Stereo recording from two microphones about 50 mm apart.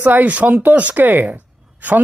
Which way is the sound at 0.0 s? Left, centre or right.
Right.